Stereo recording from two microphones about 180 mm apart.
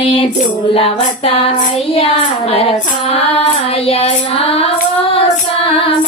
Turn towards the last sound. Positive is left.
turn(degrees=30)  # may be behind; listen again after turning